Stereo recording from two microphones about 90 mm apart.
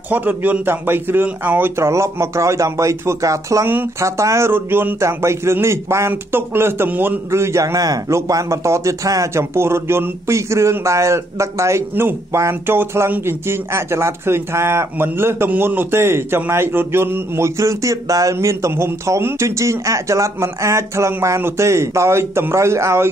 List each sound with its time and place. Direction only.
0.1 s speech: 20° right (ahead or behind)